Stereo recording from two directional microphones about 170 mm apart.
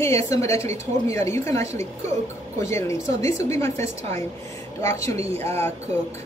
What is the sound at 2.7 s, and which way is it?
Speech, 15° left (ahead or behind).